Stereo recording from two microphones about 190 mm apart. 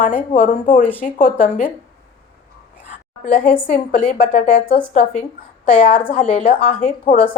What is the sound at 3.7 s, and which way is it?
A woman's voice, 35° left (ahead or behind).